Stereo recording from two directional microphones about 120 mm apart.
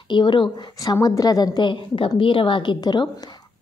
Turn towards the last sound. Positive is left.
turn(degrees=35)  # may be behind; listen again after turning